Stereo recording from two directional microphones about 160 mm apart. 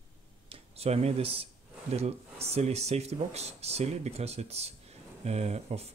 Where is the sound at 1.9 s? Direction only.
40° right (ahead or behind).